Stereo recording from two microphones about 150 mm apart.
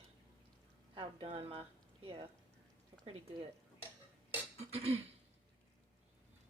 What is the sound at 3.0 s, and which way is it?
Speech, 40° right (ahead or behind).